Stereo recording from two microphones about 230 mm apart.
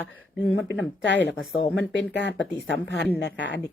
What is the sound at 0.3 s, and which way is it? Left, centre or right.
Speech, left.